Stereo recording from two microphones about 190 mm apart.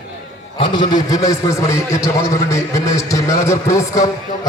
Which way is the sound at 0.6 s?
25° left (ahead or behind).